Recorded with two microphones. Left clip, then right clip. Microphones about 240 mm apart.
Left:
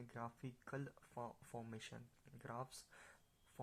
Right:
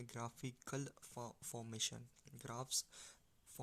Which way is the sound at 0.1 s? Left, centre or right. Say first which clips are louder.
Right 2 dB; right.